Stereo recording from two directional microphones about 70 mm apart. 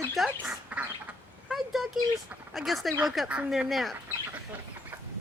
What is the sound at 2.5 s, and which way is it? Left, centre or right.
A woman's voice, centre.